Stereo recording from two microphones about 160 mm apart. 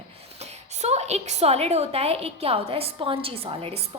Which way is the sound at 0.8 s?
45° right (ahead or behind).